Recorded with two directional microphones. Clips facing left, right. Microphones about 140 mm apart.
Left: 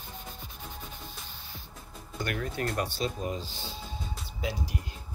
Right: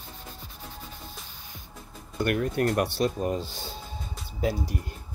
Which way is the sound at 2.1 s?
55° right (ahead or behind).